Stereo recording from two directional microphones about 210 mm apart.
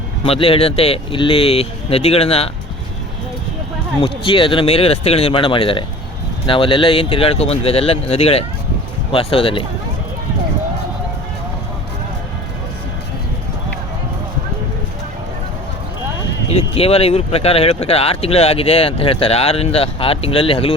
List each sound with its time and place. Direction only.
0.3 s speech: 25° left (ahead or behind)
4.0 s speech: 25° left (ahead or behind)
16.5 s speech: 30° left (ahead or behind)